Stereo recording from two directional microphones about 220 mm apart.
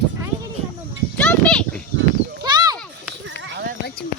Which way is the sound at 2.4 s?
20° right (ahead or behind).